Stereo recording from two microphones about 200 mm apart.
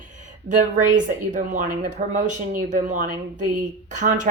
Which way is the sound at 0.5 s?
40° right (ahead or behind).